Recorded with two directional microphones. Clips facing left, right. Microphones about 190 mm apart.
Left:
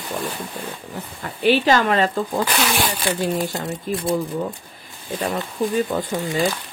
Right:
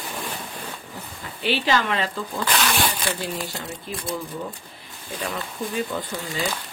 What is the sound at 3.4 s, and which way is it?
Speech, 45° left (ahead or behind).